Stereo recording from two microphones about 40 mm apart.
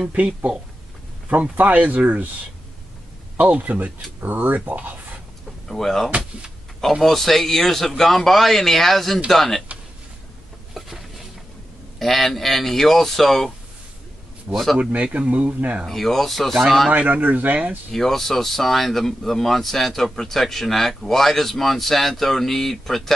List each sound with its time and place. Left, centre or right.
0.1 s speech: right
3.3 s speech: right
4.2 s speech: right
5.7 s speech: centre
12.0 s speech: centre
14.5 s speech: right
15.9 s speech: centre
16.9 s speech: right
17.9 s speech: centre